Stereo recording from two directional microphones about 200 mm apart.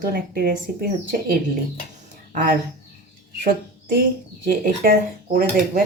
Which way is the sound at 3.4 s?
50° right (ahead or behind).